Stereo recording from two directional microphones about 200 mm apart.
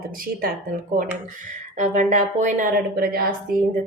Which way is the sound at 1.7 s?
35° right (ahead or behind).